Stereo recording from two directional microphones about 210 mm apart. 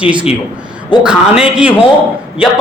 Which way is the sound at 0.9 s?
20° left (ahead or behind).